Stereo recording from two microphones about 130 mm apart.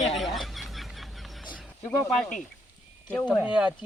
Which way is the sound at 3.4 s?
10° right (ahead or behind).